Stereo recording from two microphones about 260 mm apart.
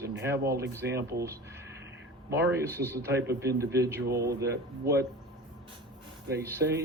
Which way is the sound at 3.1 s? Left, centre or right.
Right.